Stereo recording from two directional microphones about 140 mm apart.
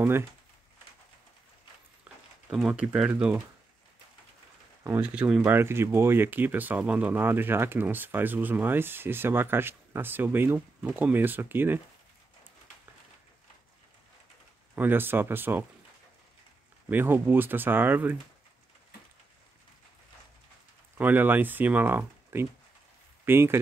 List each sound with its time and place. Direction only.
2.1 s a sound: 10° right (ahead or behind)
2.5 s speech: 5° right (ahead or behind)
4.8 s speech: 10° right (ahead or behind)
14.8 s speech: 15° right (ahead or behind)
16.9 s speech: 15° right (ahead or behind)
21.0 s speech: 15° right (ahead or behind)